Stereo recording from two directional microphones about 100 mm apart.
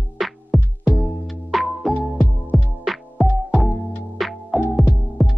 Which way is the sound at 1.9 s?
20° left (ahead or behind).